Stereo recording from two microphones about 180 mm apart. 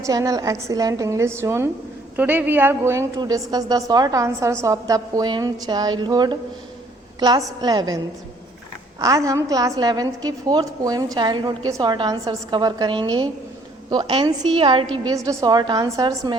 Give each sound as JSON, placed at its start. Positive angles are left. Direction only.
{"t": 0.0, "sound": "a woman's voice", "side_deg": -20}